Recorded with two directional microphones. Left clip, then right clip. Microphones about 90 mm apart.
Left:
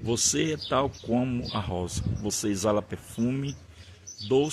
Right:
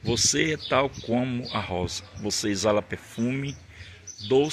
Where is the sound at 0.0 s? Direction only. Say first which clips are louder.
Right 3 dB; 30° left (ahead or behind).